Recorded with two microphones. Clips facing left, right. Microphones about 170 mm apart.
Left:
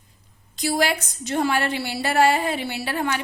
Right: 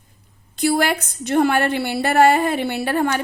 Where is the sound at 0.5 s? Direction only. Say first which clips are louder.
Right 4 dB; 55° right (ahead or behind).